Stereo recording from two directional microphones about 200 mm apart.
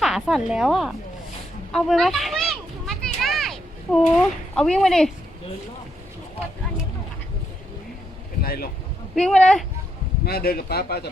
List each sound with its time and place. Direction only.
0.0 s a woman's voice: centre (ahead or behind)
1.7 s children playing: centre (ahead or behind)
8.4 s speech: 50° left (ahead or behind)
9.1 s a woman's voice: 5° left (ahead or behind)
10.2 s speech: 50° left (ahead or behind)